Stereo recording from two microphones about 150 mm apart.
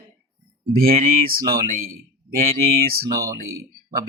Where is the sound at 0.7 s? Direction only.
75° right (ahead or behind).